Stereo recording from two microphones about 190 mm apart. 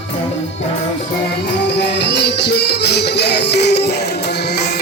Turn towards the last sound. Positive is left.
turn(degrees=60)  # may be behind; listen again after turning